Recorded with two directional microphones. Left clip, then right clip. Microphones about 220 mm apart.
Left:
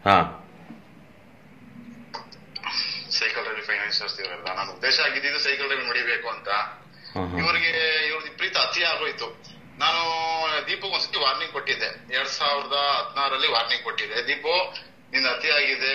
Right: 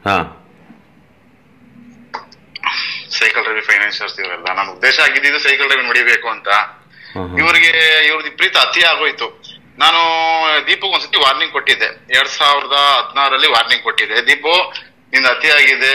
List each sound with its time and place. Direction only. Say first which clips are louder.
0.0 s speech: right 3 dB; 40° right (ahead or behind)
2.0 s speech: right 11 dB; 45° right (ahead or behind)